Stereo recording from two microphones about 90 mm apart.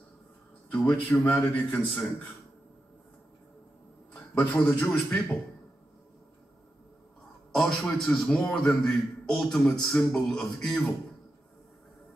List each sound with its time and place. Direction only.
0.7 s a man's voice: 15° left (ahead or behind)
4.1 s a man's voice: 15° left (ahead or behind)
7.5 s a man's voice: 5° left (ahead or behind)